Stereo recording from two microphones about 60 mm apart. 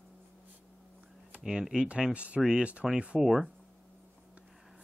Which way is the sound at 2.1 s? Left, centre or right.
Right.